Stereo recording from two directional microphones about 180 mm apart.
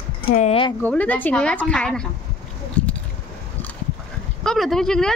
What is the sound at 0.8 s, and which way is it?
Speech, 10° left (ahead or behind).